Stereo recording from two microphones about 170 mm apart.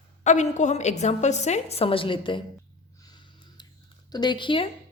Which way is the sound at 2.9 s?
25° left (ahead or behind).